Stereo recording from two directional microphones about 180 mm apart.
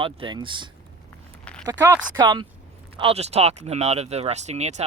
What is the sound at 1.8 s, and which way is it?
Speech, 20° right (ahead or behind).